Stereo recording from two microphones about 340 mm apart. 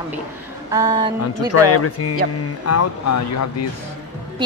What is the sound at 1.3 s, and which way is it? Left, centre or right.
Speech, left.